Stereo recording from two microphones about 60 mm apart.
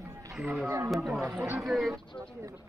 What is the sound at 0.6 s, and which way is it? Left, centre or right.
Speech, right.